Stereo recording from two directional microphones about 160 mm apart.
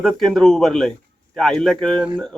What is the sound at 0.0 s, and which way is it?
Speech, 5° left (ahead or behind).